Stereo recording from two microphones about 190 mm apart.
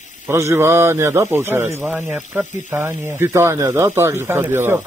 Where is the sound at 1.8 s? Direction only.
Centre (ahead or behind).